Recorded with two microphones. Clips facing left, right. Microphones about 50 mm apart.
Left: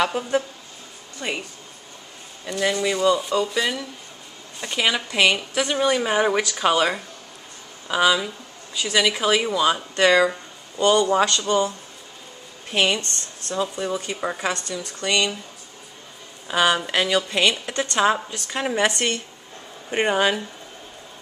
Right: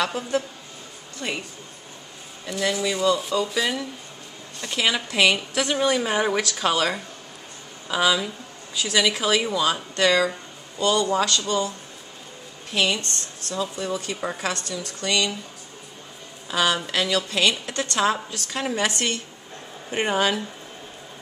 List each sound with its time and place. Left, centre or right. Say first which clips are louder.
0.0 s a woman's voice: left 3 dB; centre
2.8 s speech: left 2 dB; centre
4.6 s a woman's voice: left 1 dB; centre
12.7 s a woman's voice: left 2 dB; left
16.4 s a woman's voice: left 3 dB; centre